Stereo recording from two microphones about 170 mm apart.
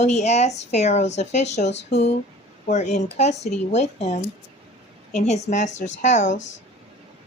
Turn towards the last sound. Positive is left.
turn(degrees=45)  # may be behind; listen again after turning